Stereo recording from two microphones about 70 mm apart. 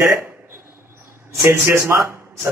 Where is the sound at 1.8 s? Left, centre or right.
Right.